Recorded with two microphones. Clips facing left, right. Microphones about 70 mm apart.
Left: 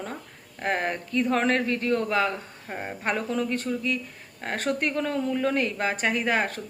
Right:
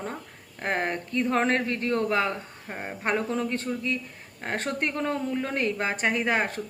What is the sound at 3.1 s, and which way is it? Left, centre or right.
Speech, right.